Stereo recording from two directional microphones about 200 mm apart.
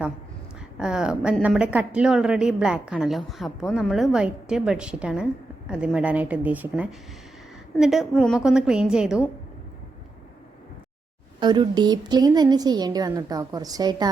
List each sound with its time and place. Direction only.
0.8 s speech: 5° right (ahead or behind)
11.3 s a woman's voice: 25° right (ahead or behind)